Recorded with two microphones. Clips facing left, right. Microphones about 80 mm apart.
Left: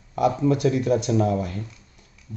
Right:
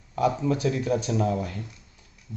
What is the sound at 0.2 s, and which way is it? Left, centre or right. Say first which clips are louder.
A man's voice: left 4 dB; centre.